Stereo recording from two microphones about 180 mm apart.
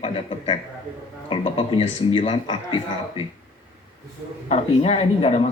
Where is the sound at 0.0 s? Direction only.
30° left (ahead or behind).